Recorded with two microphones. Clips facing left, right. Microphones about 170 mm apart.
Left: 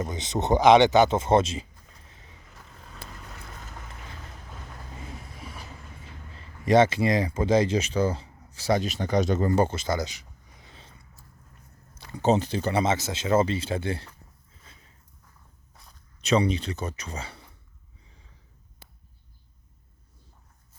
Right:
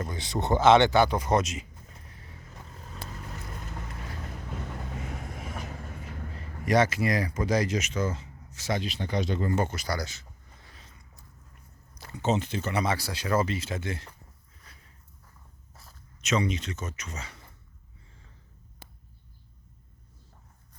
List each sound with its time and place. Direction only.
0.0 s speech: 20° left (ahead or behind)
2.0 s vehicle: 20° left (ahead or behind)
6.7 s speech: 25° left (ahead or behind)
11.9 s speech: 35° left (ahead or behind)
14.6 s a sound: 25° left (ahead or behind)
15.7 s walk: centre (ahead or behind)
16.2 s speech: 35° left (ahead or behind)